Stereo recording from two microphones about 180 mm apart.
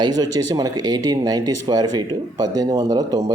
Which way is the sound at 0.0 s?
20° right (ahead or behind).